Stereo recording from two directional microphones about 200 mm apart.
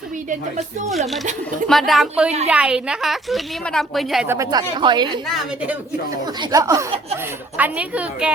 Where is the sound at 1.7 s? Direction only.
Centre (ahead or behind).